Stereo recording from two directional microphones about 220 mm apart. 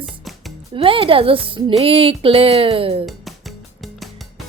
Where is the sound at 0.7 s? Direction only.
25° right (ahead or behind).